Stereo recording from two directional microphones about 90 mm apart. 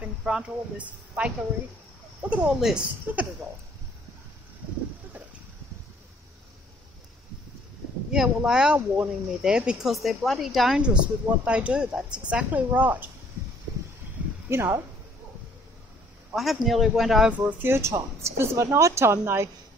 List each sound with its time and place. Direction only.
0.0 s speech: 10° right (ahead or behind)
8.1 s speech: 5° right (ahead or behind)
8.7 s speech: 20° right (ahead or behind); by 10.8 s centre (ahead or behind)
10.8 s speech: 15° right (ahead or behind)
14.5 s speech: 25° right (ahead or behind)
16.3 s speech: centre (ahead or behind)
17.3 s speech: 20° right (ahead or behind)